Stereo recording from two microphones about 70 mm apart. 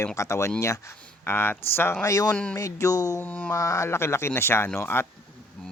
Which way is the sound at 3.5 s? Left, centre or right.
Left.